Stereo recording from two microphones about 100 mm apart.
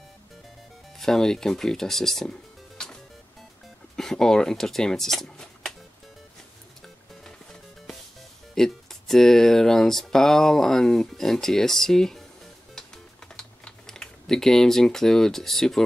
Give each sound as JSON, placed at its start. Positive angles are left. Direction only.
{"t": 0.9, "sound": "speech", "side_deg": 5}
{"t": 2.8, "sound": "music", "side_deg": 5}
{"t": 3.9, "sound": "speech", "side_deg": 5}
{"t": 8.5, "sound": "speech", "side_deg": 5}
{"t": 12.7, "sound": "typing", "side_deg": 5}